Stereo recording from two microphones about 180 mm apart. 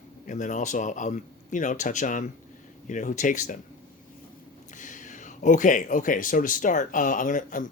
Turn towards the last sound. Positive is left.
turn(degrees=45)  # may be behind; listen again after turning